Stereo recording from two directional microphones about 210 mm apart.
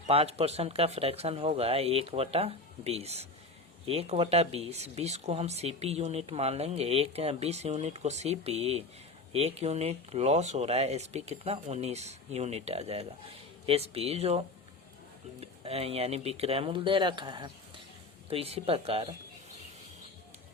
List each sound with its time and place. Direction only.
0.1 s speech: 30° right (ahead or behind)